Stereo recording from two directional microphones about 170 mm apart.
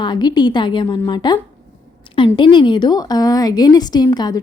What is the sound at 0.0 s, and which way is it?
A woman's voice, 25° left (ahead or behind).